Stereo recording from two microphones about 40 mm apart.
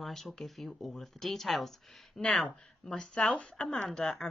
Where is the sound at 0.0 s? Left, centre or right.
Centre.